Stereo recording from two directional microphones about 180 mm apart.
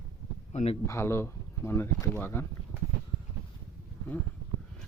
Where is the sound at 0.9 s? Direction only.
15° left (ahead or behind).